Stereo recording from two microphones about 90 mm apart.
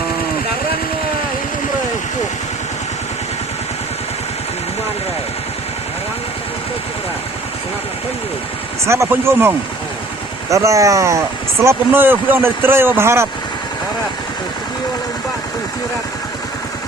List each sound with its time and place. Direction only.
9.0 s speech: 25° right (ahead or behind)
10.5 s speech: 35° right (ahead or behind)